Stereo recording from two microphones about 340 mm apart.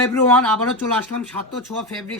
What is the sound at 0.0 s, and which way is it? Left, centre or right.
Speech, centre.